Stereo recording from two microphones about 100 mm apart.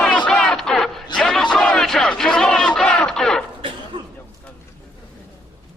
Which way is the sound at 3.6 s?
55° right (ahead or behind).